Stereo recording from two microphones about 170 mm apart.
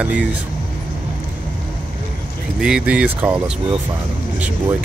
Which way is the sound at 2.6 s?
5° right (ahead or behind).